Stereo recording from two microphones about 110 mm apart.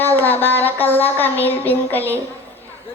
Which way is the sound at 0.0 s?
15° left (ahead or behind).